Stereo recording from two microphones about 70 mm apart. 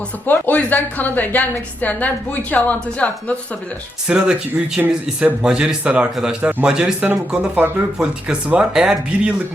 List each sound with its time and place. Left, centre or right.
0.3 s a woman's voice: left
4.0 s speech: centre